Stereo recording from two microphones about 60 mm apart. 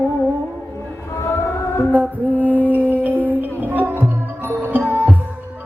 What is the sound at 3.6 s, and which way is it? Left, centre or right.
Music, right.